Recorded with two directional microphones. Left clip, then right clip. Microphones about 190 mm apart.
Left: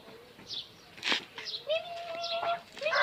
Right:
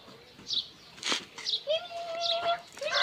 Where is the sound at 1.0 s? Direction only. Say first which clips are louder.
Even; 15° left (ahead or behind).